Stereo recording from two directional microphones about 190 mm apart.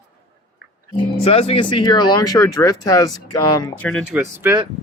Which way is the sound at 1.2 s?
30° left (ahead or behind).